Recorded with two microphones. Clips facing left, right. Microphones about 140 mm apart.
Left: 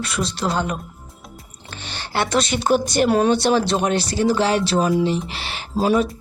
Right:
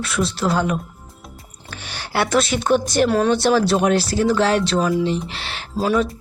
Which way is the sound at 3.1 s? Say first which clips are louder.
Left 3 dB; 15° left (ahead or behind).